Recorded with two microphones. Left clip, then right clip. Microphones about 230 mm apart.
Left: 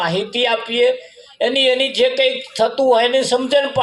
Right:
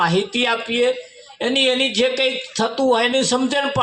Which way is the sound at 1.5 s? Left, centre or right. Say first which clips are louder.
Left 2 dB; left.